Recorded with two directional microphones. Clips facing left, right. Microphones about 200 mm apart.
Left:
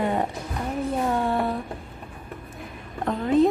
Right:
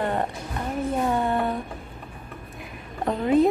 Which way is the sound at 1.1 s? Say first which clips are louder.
Even; centre (ahead or behind).